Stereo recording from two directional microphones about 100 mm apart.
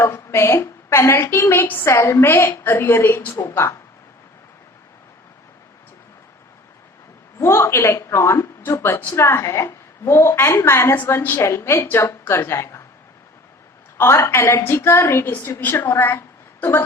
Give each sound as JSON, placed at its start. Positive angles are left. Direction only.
{"t": 0.0, "sound": "a woman's voice", "side_deg": 25}
{"t": 7.3, "sound": "a woman's voice", "side_deg": 25}
{"t": 14.0, "sound": "a woman's voice", "side_deg": 25}